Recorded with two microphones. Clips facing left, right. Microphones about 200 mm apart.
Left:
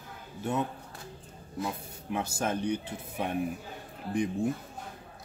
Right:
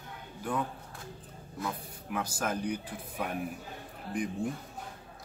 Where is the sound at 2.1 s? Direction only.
25° left (ahead or behind).